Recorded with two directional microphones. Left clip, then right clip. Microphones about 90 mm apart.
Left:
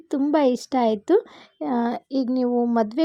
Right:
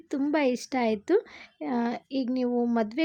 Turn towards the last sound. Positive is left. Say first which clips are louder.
# left 6 dB
turn(degrees=35)  # may be behind; listen again after turning